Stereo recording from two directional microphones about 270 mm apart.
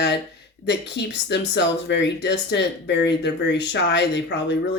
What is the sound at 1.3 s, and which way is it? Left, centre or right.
Speech, left.